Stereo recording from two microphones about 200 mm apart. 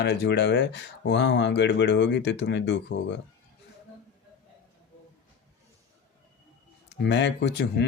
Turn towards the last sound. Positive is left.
turn(degrees=60)  # may be behind; listen again after turning